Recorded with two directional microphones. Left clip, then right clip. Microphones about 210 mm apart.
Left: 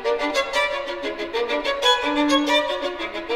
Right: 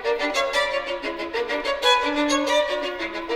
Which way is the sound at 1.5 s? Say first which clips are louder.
Even; 30° left (ahead or behind).